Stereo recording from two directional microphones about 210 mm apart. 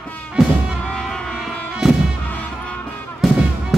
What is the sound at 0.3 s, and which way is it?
Music, centre (ahead or behind).